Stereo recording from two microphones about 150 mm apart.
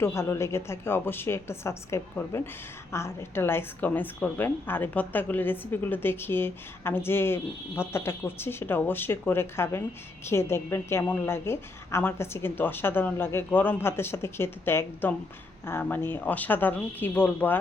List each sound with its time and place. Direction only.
0.0 s a woman's voice: 15° left (ahead or behind)